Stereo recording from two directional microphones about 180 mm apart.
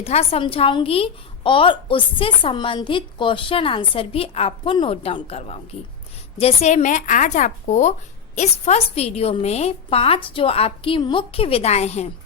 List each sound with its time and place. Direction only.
0.0 s a woman's voice: 35° left (ahead or behind)